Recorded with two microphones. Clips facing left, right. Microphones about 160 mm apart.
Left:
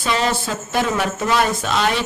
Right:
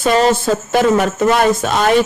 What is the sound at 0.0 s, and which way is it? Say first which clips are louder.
Speech: right 8 dB; 45° right (ahead or behind).